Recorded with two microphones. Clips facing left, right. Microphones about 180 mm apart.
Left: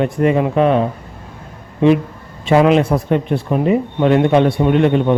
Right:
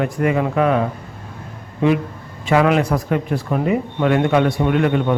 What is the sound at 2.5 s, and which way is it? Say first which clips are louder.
A man's voice: left 4 dB; 25° left (ahead or behind).